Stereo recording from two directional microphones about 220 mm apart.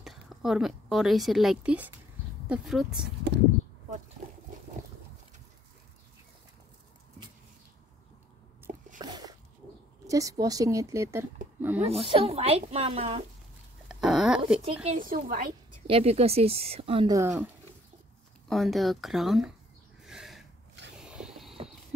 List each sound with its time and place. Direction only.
0.0 s a woman's voice: centre (ahead or behind)
3.3 s speech: 50° right (ahead or behind)
9.0 s dog: 20° right (ahead or behind)
10.0 s speech: 15° right (ahead or behind)
12.1 s speech: 25° right (ahead or behind)
13.8 s a sound: 5° right (ahead or behind)
14.6 s a woman's voice: 35° right (ahead or behind)
15.9 s speech: 30° right (ahead or behind)
18.5 s speech: centre (ahead or behind)
20.0 s a sound: centre (ahead or behind)